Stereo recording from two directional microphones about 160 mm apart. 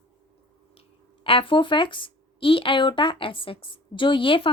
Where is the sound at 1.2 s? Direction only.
35° left (ahead or behind).